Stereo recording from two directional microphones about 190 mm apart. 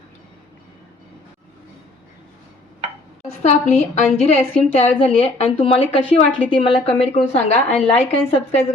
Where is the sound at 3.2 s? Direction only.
35° left (ahead or behind).